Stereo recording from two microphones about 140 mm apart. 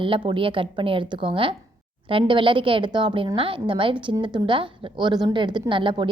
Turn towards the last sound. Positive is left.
turn(degrees=-35)  # may be behind; listen again after turning